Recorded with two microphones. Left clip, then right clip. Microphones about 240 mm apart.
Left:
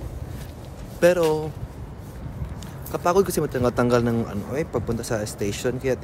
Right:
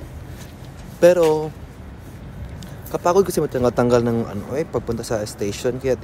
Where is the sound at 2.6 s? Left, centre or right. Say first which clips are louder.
Right 3 dB; centre.